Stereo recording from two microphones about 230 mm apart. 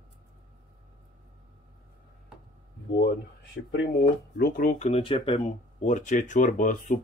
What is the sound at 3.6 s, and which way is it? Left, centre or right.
Speech, left.